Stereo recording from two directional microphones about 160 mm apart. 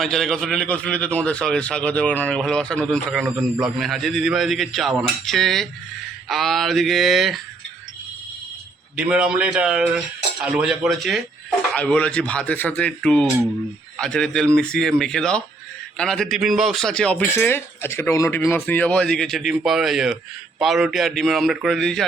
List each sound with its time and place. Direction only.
0.0 s a man's voice: centre (ahead or behind)
9.0 s a man's voice: 5° right (ahead or behind)